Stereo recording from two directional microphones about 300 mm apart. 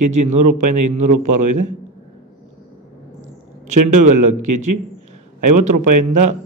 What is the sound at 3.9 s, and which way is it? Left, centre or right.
A man's voice, right.